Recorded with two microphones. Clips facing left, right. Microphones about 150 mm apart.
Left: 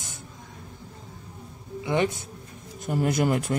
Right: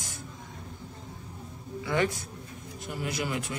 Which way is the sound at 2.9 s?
45° left (ahead or behind).